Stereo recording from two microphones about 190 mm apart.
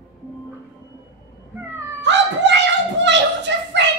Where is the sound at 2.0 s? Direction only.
65° right (ahead or behind).